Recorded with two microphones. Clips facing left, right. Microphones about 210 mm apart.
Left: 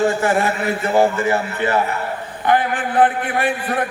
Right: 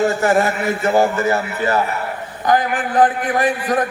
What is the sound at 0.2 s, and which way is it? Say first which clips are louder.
A man's voice: right 2 dB; 40° right (ahead or behind).